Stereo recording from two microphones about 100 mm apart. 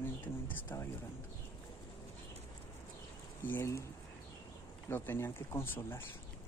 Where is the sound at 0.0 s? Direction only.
20° left (ahead or behind).